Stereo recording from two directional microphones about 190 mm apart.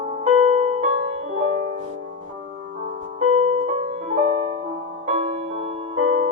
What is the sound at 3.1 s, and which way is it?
Music, 35° right (ahead or behind).